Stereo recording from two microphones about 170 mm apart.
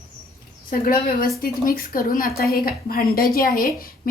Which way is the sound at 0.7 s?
55° left (ahead or behind).